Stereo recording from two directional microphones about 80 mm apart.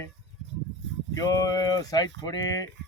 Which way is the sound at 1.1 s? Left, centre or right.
Left.